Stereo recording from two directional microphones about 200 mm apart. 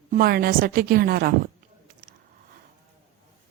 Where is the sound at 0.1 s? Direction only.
50° right (ahead or behind).